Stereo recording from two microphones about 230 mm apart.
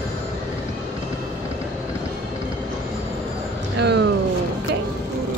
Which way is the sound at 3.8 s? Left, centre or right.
Right.